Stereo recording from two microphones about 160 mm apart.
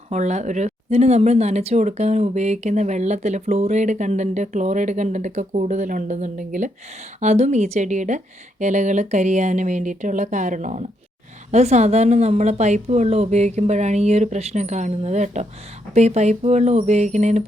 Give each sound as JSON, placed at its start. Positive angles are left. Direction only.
{"t": 0.1, "sound": "speech", "side_deg": -45}